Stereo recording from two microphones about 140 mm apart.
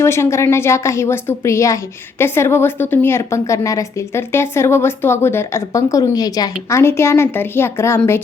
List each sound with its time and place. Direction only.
0.0 s a woman's voice: 20° left (ahead or behind)